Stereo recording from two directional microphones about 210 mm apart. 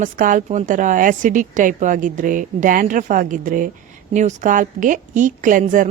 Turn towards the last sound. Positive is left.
turn(degrees=-40)  # may be behind; listen again after turning